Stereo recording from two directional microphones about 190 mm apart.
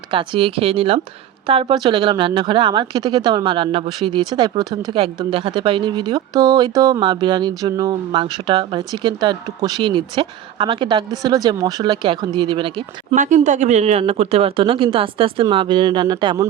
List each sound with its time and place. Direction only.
0.1 s speech: 25° right (ahead or behind)
13.1 s speech: 40° right (ahead or behind); by 16.5 s 25° right (ahead or behind)